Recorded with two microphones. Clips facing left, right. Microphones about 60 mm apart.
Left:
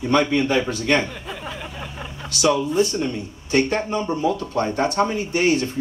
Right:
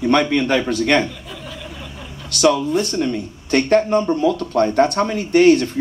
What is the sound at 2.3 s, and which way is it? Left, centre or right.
Speech, right.